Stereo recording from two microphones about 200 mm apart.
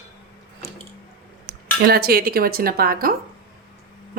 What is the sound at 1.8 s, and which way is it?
Speech, 50° right (ahead or behind).